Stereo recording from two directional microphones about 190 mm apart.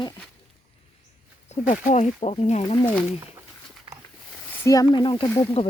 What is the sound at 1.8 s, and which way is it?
Speech, 35° left (ahead or behind).